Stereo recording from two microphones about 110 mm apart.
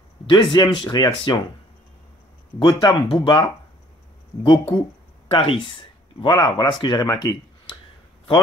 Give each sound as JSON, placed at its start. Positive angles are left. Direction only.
{"t": 0.3, "sound": "speech", "side_deg": 45}
{"t": 2.6, "sound": "speech", "side_deg": 45}